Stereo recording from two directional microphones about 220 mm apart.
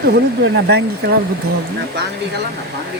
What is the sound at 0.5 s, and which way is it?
Speech, 50° right (ahead or behind).